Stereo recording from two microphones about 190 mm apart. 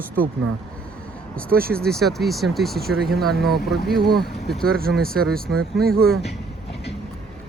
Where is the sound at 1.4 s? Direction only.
50° right (ahead or behind).